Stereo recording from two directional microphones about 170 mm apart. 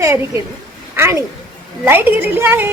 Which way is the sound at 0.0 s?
15° right (ahead or behind).